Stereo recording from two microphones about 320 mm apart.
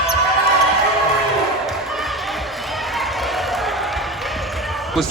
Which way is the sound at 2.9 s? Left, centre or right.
Centre.